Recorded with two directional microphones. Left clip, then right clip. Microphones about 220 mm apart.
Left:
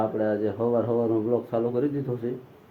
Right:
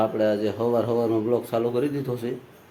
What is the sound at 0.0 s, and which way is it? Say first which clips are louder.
Speech: right 3 dB; 15° right (ahead or behind).